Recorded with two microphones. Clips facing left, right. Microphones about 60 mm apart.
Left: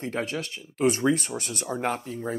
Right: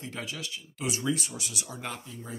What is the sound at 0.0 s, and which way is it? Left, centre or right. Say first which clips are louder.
Speech: left 8 dB; left.